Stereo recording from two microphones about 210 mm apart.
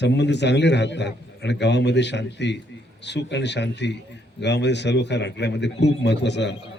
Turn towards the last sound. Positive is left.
turn(degrees=55)  # may be behind; listen again after turning